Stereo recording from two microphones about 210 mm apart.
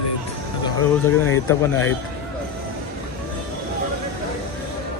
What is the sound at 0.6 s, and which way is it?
Speech, 10° left (ahead or behind).